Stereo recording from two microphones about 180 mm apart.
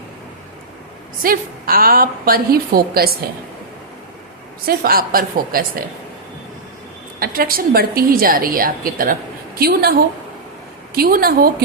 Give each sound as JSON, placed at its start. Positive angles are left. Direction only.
{"t": 1.2, "sound": "a woman's voice", "side_deg": -55}
{"t": 4.6, "sound": "a woman's voice", "side_deg": -55}
{"t": 7.2, "sound": "a woman's voice", "side_deg": -55}